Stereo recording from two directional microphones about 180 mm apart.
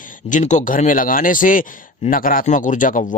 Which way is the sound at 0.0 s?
45° left (ahead or behind).